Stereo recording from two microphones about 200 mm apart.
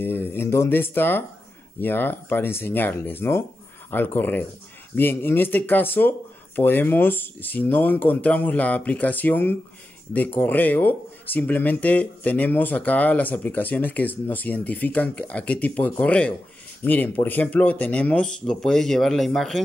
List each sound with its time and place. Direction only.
0.0 s speech: 10° left (ahead or behind)